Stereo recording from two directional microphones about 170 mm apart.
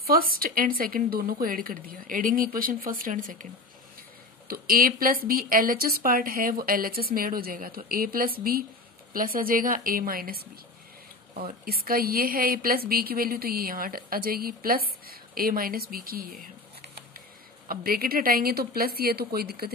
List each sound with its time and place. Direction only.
0.0 s a woman's voice: 60° right (ahead or behind)
4.5 s a woman's voice: 60° right (ahead or behind)
11.6 s a woman's voice: 60° right (ahead or behind)
17.6 s a woman's voice: 60° right (ahead or behind)